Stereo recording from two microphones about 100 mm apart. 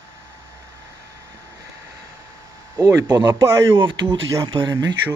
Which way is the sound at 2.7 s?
35° right (ahead or behind).